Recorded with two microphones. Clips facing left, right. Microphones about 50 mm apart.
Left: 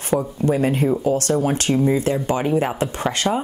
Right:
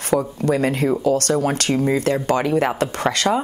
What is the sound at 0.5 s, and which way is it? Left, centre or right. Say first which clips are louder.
A woman's voice: even; right.